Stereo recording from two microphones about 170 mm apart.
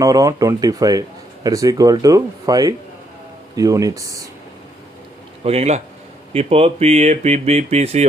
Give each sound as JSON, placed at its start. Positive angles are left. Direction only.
{"t": 0.0, "sound": "speech", "side_deg": -20}
{"t": 5.4, "sound": "speech", "side_deg": -35}